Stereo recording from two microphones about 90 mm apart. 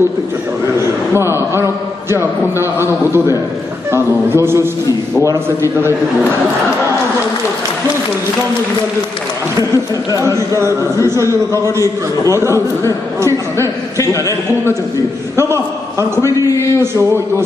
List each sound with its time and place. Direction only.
1.1 s a man's voice: 30° right (ahead or behind)
10.1 s a man's voice: 35° right (ahead or behind)
12.3 s a man's voice: 35° right (ahead or behind)
15.3 s a man's voice: 30° right (ahead or behind)
16.4 s a man's voice: 30° left (ahead or behind)
16.8 s a man's voice: 30° right (ahead or behind)